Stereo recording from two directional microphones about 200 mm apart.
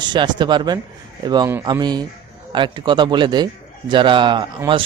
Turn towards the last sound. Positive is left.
turn(degrees=-25)  # may be behind; listen again after turning